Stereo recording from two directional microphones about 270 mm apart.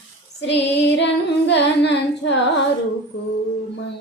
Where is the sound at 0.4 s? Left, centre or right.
Left.